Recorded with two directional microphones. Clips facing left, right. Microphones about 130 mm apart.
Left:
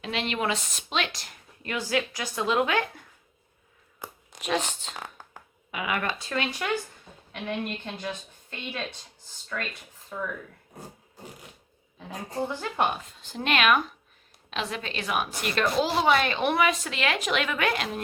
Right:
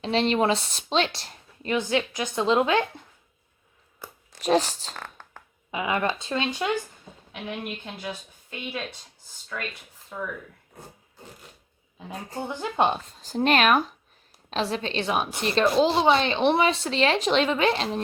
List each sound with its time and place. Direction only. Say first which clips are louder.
0.0 s speech: right 7 dB; 30° right (ahead or behind)
4.0 s a sound: left 2 dB; 20° left (ahead or behind)
4.4 s speech: right 6 dB; 35° right (ahead or behind)
4.9 s a sound: even; 10° left (ahead or behind)
5.7 s a woman's voice: right 4 dB; 25° right (ahead or behind)
7.6 s speech: left 1 dB; 10° right (ahead or behind)
12.5 s a woman's voice: right 6 dB; 20° right (ahead or behind)
13.1 s a woman's voice: right 6 dB; 40° right (ahead or behind)